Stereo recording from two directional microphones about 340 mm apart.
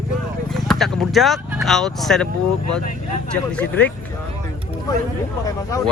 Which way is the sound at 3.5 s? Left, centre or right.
Centre.